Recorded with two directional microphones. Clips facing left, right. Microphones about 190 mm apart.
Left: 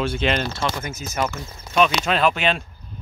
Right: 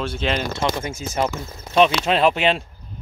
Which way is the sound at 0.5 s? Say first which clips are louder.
Right 3 dB; 25° right (ahead or behind).